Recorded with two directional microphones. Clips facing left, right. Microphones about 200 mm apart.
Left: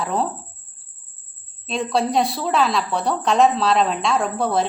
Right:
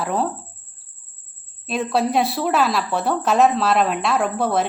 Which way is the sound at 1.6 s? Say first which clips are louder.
Right 1 dB; 5° right (ahead or behind).